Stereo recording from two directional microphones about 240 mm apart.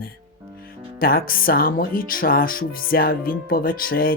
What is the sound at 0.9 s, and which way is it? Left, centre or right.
Speech, left.